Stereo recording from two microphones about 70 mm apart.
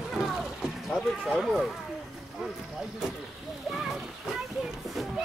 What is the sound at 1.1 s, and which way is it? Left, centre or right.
Speech, centre.